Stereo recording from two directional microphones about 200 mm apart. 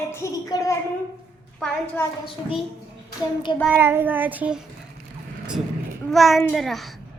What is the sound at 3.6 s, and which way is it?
Child singing, 10° right (ahead or behind).